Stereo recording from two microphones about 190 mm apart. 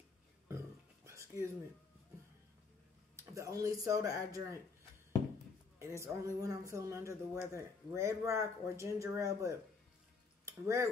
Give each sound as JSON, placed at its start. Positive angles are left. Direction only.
{"t": 0.5, "sound": "a sound", "side_deg": -15}
{"t": 3.2, "sound": "speech", "side_deg": -15}
{"t": 5.8, "sound": "speech", "side_deg": -15}